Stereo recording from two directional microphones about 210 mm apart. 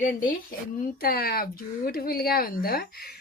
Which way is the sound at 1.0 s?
45° left (ahead or behind).